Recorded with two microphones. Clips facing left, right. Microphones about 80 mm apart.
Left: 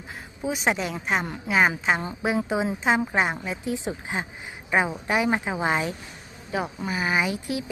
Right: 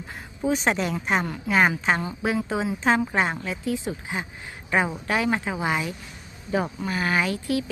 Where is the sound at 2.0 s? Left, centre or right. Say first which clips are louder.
Even; left.